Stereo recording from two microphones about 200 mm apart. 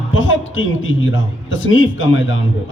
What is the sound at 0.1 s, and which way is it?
A man's voice, 75° left (ahead or behind).